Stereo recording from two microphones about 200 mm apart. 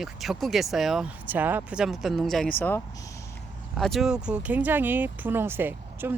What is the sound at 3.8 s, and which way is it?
Speech, centre (ahead or behind).